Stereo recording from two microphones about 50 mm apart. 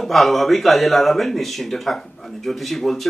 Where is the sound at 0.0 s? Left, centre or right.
Centre.